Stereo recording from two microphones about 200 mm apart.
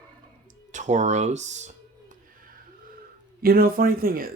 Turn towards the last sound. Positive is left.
turn(degrees=-45)  # may be behind; listen again after turning